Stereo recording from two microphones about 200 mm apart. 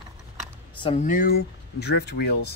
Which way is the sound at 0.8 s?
35° left (ahead or behind).